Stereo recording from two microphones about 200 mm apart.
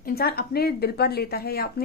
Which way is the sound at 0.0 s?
50° left (ahead or behind).